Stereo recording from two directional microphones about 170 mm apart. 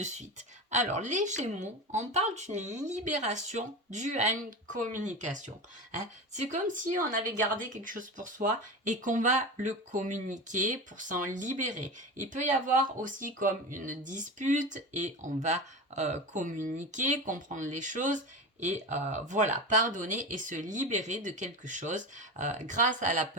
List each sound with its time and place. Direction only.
0.0 s speech: 45° right (ahead or behind)